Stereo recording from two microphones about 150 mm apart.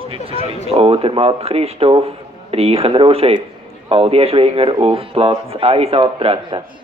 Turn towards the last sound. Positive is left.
turn(degrees=-35)  # may be behind; listen again after turning